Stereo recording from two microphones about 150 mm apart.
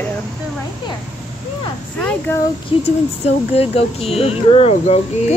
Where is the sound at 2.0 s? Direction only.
10° left (ahead or behind).